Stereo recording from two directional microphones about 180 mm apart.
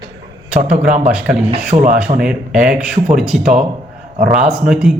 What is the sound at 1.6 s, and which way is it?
Speech, 45° right (ahead or behind).